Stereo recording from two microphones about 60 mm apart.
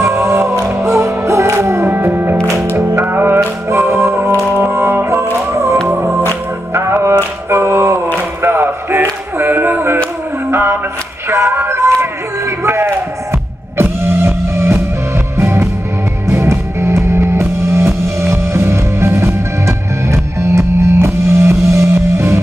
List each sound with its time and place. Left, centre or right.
0.0 s music: right
1.9 s music: right
3.7 s music: right
8.4 s a sound: right
9.4 s music: right
11.2 s a sound: right
13.7 s vehicle: right
15.3 s music: right